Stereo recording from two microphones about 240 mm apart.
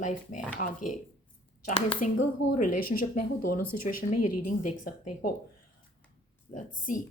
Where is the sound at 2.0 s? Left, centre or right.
Left.